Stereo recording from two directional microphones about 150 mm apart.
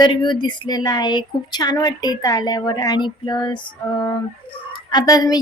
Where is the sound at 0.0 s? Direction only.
30° left (ahead or behind).